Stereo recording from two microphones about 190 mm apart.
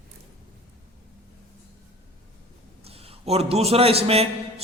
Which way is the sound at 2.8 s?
30° right (ahead or behind).